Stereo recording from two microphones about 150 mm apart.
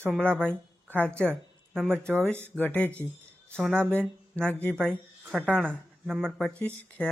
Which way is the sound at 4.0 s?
10° left (ahead or behind).